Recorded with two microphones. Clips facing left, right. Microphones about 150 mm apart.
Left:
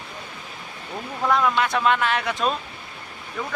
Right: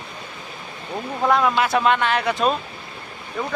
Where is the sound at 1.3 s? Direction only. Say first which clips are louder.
Right 2 dB; 5° right (ahead or behind).